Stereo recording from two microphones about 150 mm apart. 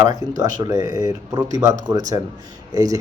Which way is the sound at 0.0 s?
25° right (ahead or behind).